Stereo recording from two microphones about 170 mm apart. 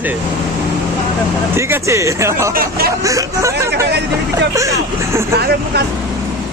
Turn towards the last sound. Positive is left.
turn(degrees=-70)  # may be behind; listen again after turning